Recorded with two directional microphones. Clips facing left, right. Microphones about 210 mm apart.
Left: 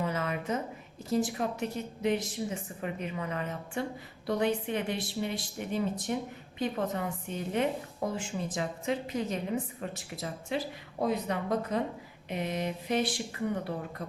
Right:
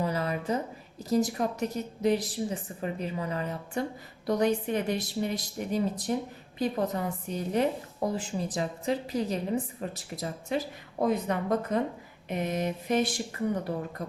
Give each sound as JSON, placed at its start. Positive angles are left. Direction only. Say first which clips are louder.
{"t": 0.0, "sound": "a sound", "louder": "right 2 dB", "side_deg": -35}
{"t": 1.1, "sound": "a woman's voice", "louder": "right 3 dB", "side_deg": -40}
{"t": 11.0, "sound": "speech", "louder": "right 3 dB", "side_deg": -50}